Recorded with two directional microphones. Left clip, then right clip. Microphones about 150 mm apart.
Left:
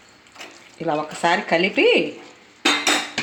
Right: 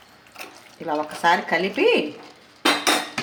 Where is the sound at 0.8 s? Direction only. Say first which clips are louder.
Even; 65° left (ahead or behind).